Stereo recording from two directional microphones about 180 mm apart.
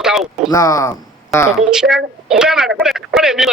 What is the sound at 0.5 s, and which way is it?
Speech, 20° left (ahead or behind).